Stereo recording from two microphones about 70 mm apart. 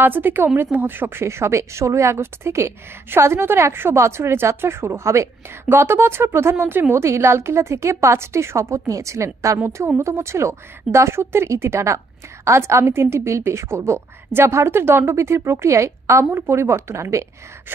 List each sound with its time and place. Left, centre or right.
0.0 s a woman's voice: right